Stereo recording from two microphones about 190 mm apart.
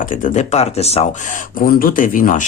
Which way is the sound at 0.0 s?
45° left (ahead or behind).